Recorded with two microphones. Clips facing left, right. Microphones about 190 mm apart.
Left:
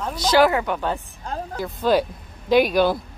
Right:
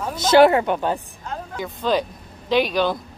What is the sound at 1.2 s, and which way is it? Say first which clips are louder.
Vehicle: left 2 dB; 35° left (ahead or behind).